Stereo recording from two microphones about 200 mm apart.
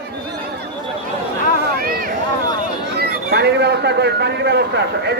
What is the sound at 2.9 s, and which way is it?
A man's voice, 55° right (ahead or behind).